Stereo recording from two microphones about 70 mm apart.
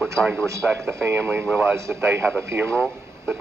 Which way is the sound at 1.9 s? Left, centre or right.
Right.